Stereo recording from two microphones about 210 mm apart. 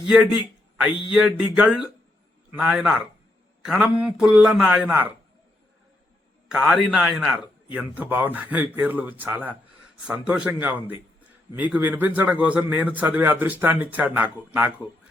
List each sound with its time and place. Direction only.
0.0 s a man's voice: 5° right (ahead or behind)
6.5 s a man's voice: centre (ahead or behind)